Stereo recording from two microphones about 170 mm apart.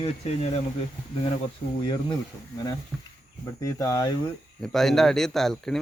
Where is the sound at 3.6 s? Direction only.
20° left (ahead or behind).